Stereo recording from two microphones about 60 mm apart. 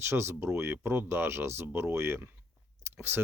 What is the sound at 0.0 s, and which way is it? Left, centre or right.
Speech, right.